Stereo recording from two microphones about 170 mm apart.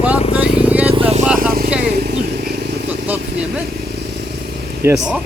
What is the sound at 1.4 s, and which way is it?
Vehicle, 60° right (ahead or behind).